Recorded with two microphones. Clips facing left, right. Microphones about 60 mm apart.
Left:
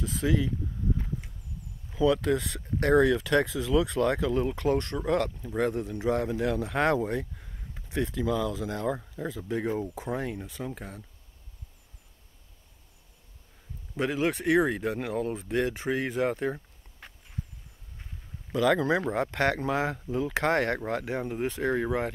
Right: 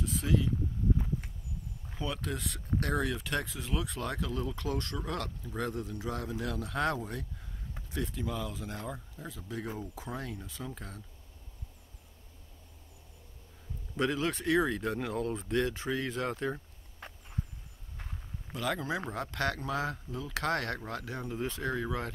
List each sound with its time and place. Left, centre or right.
0.0 s speech: left
2.2 s speech: left
4.6 s speech: left
6.1 s speech: left
8.1 s speech: left
9.1 s speech: left
9.4 s speech: left
10.8 s speech: centre
13.9 s speech: centre
18.5 s speech: left
19.0 s speech: left
20.1 s speech: left
20.3 s speech: left